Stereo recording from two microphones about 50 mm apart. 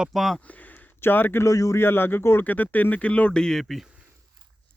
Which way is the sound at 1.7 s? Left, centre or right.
Left.